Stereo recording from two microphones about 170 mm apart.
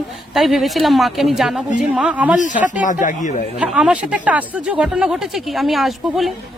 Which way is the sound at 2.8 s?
50° left (ahead or behind).